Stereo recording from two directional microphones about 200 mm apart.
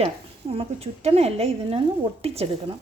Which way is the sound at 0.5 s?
30° right (ahead or behind).